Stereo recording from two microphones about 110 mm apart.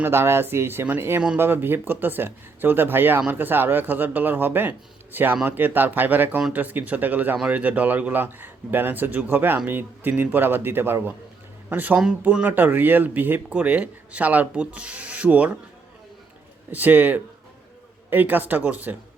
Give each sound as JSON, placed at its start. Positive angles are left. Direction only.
{"t": 0.0, "sound": "speech", "side_deg": -20}
{"t": 16.7, "sound": "speech", "side_deg": -15}